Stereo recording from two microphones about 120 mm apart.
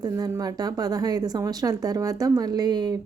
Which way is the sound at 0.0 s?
35° right (ahead or behind).